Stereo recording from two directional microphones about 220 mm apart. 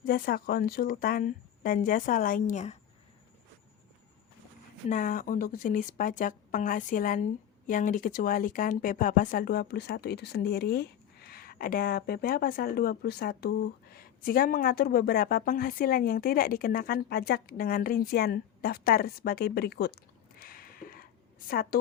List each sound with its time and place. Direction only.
0.0 s a woman's voice: 40° left (ahead or behind)
4.9 s a woman's voice: 35° left (ahead or behind)
20.4 s a sound: 40° left (ahead or behind)